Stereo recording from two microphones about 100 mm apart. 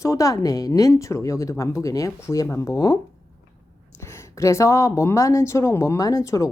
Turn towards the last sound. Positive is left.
turn(degrees=35)  # may be behind; listen again after turning